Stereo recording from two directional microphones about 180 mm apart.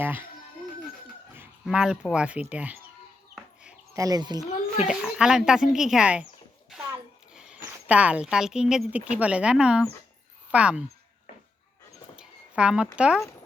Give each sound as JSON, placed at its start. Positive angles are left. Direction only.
{"t": 0.0, "sound": "speech", "side_deg": -10}
{"t": 1.4, "sound": "a sound", "side_deg": -5}
{"t": 2.1, "sound": "speech", "side_deg": -5}
{"t": 3.3, "sound": "chicken", "side_deg": -5}
{"t": 3.9, "sound": "speech", "side_deg": -20}
{"t": 4.9, "sound": "speech", "side_deg": -5}
{"t": 7.3, "sound": "a sound", "side_deg": -5}
{"t": 8.7, "sound": "speech", "side_deg": -5}
{"t": 12.1, "sound": "a sound", "side_deg": -5}